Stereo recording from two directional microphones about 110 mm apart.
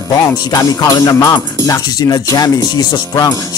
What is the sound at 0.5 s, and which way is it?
Speech, 35° left (ahead or behind).